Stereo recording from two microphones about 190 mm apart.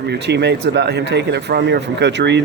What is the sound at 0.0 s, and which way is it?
Speech, 60° right (ahead or behind).